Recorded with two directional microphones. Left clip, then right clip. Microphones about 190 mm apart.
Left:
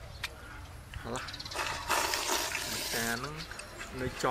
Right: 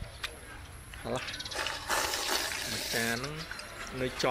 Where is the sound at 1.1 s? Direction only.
15° right (ahead or behind).